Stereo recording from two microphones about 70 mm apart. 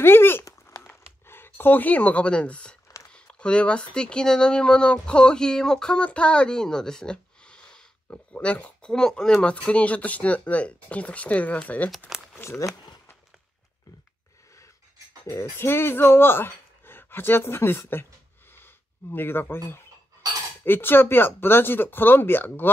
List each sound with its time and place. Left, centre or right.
0.0 s speech: left
0.5 s a sound: left
0.8 s a sound: left; by 2.8 s centre
3.1 s speech: centre
12.4 s speech: left
15.5 s speech: left
19.1 s speech: left